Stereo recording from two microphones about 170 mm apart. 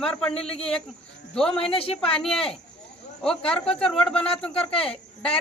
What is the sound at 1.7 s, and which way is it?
Speech, 35° left (ahead or behind).